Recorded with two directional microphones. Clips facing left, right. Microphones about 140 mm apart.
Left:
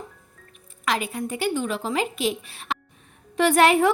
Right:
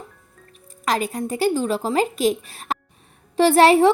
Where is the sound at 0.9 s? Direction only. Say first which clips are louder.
Right 3 dB; 40° right (ahead or behind).